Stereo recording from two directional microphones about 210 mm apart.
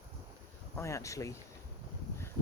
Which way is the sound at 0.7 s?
15° left (ahead or behind).